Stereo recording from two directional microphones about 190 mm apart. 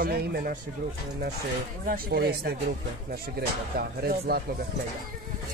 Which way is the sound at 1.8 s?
50° right (ahead or behind).